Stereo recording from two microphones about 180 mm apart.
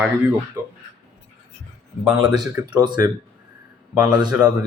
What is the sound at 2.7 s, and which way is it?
Speech, 25° right (ahead or behind).